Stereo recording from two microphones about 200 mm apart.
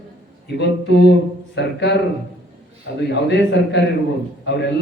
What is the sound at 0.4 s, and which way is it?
A man's voice, 55° left (ahead or behind).